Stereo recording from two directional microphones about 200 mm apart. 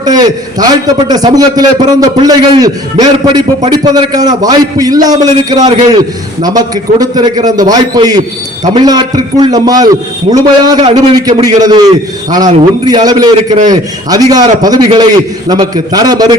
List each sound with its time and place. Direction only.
0.0 s a man's voice: 20° right (ahead or behind)